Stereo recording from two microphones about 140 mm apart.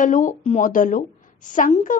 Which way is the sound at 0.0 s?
65° left (ahead or behind).